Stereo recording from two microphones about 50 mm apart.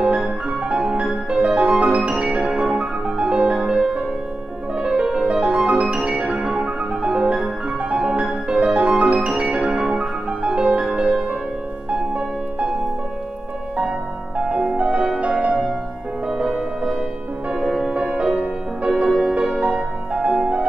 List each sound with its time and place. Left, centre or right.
0.0 s music: centre
2.4 s music: centre
13.7 s music: centre
18.9 s music: centre
19.7 s music: right